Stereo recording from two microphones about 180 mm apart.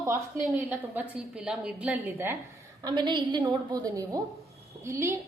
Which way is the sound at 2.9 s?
25° right (ahead or behind).